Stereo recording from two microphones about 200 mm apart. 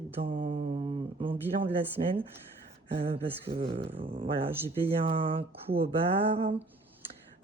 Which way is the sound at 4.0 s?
30° right (ahead or behind).